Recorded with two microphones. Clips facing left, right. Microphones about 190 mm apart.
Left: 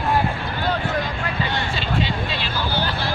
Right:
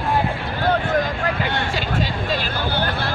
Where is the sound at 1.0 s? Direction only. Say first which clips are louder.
Right 3 dB; 60° right (ahead or behind).